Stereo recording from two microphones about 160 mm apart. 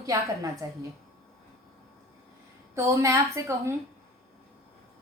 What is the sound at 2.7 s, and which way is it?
A woman's voice, 20° right (ahead or behind).